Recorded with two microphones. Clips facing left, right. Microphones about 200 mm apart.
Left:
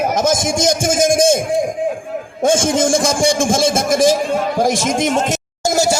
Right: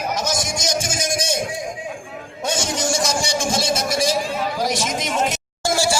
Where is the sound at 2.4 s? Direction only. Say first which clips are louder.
Left 9 dB; 50° left (ahead or behind).